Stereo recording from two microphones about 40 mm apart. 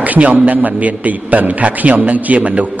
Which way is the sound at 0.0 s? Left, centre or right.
Right.